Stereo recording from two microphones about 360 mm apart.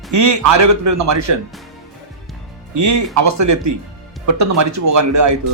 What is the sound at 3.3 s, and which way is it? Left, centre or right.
A man's voice, right.